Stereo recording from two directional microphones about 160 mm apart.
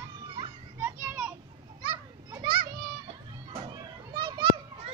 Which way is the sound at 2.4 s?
30° right (ahead or behind).